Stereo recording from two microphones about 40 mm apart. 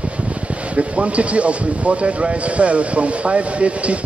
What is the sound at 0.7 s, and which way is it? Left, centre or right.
Speech, right.